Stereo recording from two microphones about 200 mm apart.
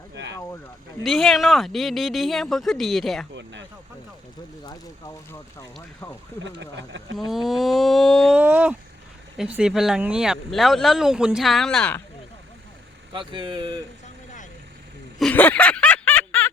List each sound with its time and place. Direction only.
0.1 s a sound: 65° right (ahead or behind)
1.0 s speech: centre (ahead or behind)
4.6 s speech: 15° left (ahead or behind)
6.4 s speech: 65° right (ahead or behind)
7.3 s speech: centre (ahead or behind)
13.1 s speech: 25° right (ahead or behind)
15.2 s snicker: 10° left (ahead or behind)